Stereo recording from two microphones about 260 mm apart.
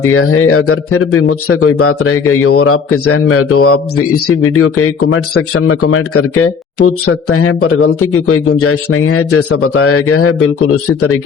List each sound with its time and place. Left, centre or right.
0.1 s a man's voice: left